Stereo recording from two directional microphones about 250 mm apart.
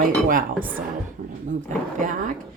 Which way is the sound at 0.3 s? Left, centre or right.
Right.